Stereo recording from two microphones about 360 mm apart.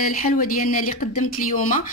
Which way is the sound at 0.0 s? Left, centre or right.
Left.